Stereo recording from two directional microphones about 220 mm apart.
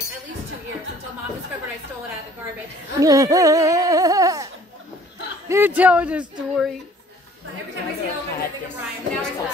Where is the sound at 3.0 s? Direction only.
15° right (ahead or behind).